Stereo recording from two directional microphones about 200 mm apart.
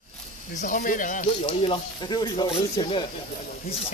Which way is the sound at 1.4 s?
30° left (ahead or behind).